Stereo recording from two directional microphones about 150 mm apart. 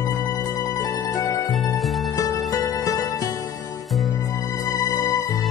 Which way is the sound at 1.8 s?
Centre (ahead or behind).